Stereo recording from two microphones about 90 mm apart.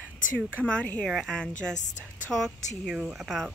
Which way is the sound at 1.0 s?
5° left (ahead or behind).